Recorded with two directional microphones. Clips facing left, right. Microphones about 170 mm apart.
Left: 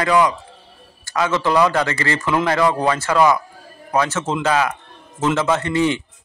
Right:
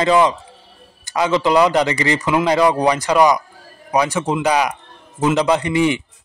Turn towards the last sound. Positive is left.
turn(degrees=-15)  # may be behind; listen again after turning